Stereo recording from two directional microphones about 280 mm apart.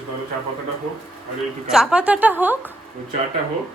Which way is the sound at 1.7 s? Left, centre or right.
Centre.